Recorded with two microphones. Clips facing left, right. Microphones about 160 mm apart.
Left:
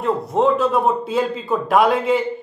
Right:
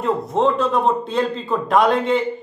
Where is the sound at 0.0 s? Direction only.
Centre (ahead or behind).